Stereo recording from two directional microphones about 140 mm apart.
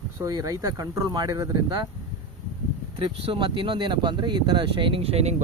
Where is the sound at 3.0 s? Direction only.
40° right (ahead or behind).